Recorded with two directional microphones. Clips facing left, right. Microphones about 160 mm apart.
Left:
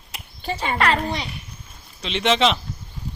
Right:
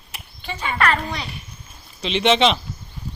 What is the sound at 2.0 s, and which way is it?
Speech, centre (ahead or behind).